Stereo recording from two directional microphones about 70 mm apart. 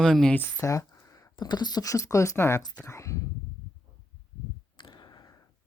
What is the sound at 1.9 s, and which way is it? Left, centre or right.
Speech, left.